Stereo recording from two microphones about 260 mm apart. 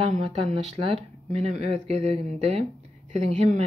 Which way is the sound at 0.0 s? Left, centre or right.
Right.